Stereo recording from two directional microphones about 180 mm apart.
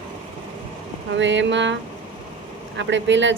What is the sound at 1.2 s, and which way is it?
Speech, 90° right.